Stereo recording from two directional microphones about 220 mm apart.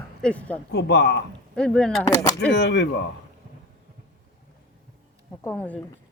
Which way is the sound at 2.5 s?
50° left (ahead or behind).